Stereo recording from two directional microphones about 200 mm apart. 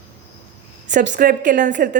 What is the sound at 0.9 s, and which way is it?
A woman's voice, 40° right (ahead or behind).